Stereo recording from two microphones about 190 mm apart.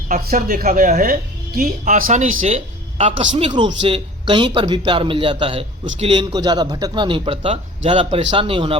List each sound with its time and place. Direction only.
0.1 s speech: 45° right (ahead or behind); by 8.8 s 30° right (ahead or behind)